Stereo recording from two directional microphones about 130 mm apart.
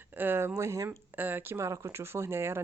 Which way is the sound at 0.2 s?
15° right (ahead or behind).